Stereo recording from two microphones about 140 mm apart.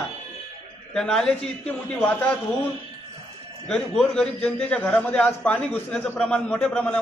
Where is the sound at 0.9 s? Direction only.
5° left (ahead or behind).